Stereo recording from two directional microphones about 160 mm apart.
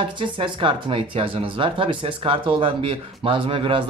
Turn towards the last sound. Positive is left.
turn(degrees=-30)  # may be behind; listen again after turning